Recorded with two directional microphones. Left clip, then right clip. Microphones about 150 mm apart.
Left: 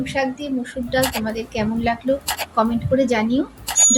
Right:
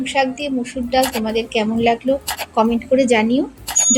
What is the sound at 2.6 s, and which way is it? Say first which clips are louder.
Speech: right 3 dB; 20° right (ahead or behind).